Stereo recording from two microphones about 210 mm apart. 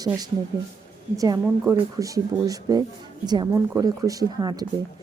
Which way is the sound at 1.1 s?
15° right (ahead or behind).